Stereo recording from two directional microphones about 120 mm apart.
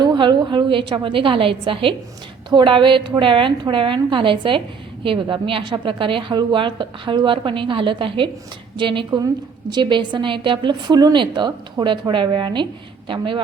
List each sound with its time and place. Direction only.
0.0 s a woman's voice: 40° right (ahead or behind)